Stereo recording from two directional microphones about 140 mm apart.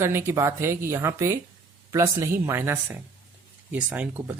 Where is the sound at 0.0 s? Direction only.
20° right (ahead or behind).